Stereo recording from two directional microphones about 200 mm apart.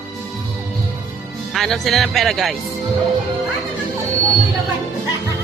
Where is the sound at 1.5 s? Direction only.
Centre (ahead or behind).